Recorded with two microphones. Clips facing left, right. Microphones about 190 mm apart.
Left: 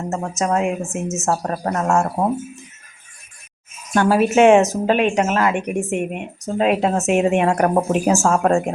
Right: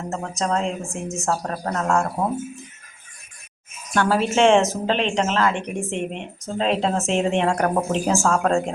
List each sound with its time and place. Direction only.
0.1 s speech: 15° left (ahead or behind)
3.9 s speech: 15° left (ahead or behind)